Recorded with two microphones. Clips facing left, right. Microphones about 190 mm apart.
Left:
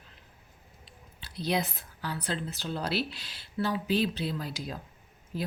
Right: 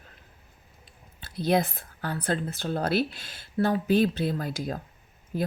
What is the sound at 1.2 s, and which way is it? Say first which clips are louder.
Speech: right 6 dB; 50° right (ahead or behind).